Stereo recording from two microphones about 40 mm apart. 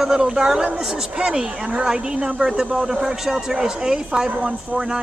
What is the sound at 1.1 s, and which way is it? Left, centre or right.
Speech, centre.